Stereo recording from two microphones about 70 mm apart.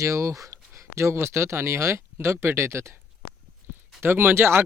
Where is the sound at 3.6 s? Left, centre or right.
Right.